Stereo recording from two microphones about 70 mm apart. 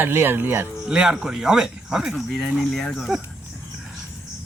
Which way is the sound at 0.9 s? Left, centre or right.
Centre.